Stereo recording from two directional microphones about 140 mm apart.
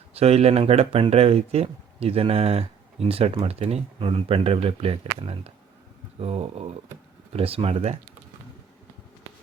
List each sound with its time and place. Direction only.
0.1 s speech: 45° right (ahead or behind)